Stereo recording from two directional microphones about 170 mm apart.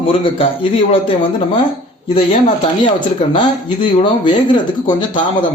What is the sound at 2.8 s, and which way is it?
Speech, 30° left (ahead or behind).